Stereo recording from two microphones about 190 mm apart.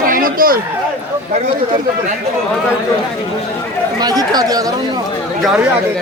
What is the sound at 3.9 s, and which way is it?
Speech, 20° right (ahead or behind).